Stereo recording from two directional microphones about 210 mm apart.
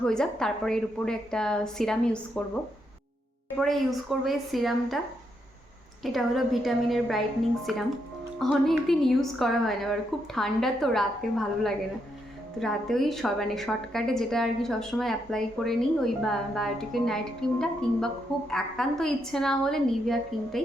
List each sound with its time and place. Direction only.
0.0 s a woman's voice: 5° left (ahead or behind)
3.6 s a woman's voice: centre (ahead or behind)
6.0 s a woman's voice: centre (ahead or behind)